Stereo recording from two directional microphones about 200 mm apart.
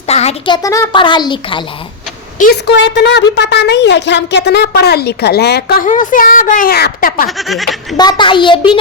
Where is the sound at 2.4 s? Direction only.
55° left (ahead or behind).